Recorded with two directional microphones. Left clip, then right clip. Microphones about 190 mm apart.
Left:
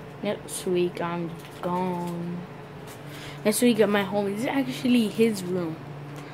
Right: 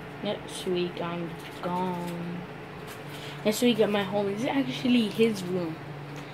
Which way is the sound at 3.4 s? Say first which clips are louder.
Left 3 dB; 15° left (ahead or behind).